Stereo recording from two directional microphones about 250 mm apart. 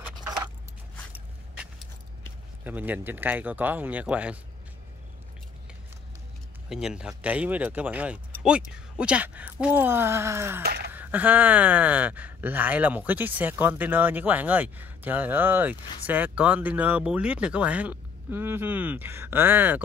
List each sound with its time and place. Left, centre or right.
0.2 s keys jangling: centre
2.6 s speech: centre
6.7 s speech: centre
10.6 s a sound: right
10.9 s speech: centre